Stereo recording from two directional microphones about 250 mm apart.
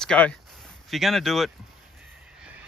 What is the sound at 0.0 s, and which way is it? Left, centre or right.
Speech, centre.